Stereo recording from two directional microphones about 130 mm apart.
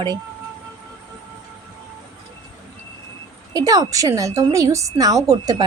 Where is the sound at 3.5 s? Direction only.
25° right (ahead or behind).